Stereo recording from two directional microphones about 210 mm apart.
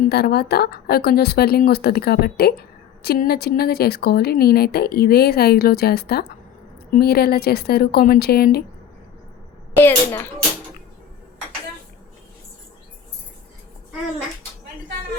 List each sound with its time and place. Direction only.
0.1 s speech: 50° left (ahead or behind)
9.7 s a child's voice: 10° left (ahead or behind)